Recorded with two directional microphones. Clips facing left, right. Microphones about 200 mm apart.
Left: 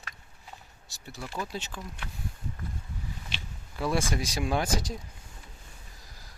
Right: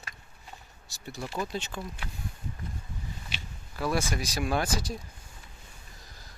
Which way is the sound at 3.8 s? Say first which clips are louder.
Left 1 dB; 25° left (ahead or behind).